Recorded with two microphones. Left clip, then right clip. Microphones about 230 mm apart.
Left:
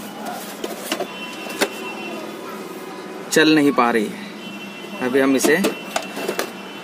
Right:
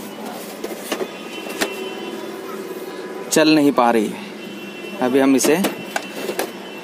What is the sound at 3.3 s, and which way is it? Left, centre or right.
Speech, centre.